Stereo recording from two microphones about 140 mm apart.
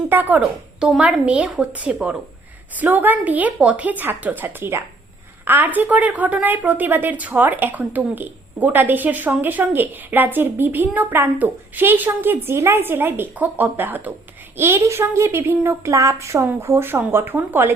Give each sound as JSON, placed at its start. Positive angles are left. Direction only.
{"t": 0.1, "sound": "a woman's voice", "side_deg": -15}